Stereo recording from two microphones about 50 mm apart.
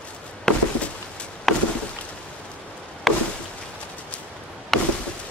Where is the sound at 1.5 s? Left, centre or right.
Centre.